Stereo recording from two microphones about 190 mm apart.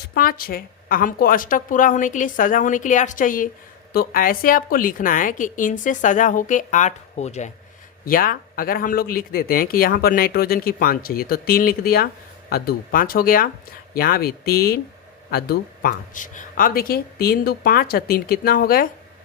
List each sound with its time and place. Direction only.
0.1 s speech: 50° left (ahead or behind)
8.0 s speech: 50° left (ahead or behind)